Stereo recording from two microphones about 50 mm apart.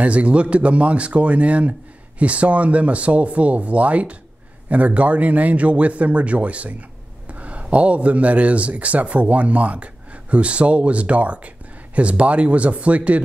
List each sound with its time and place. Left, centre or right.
0.0 s speech: right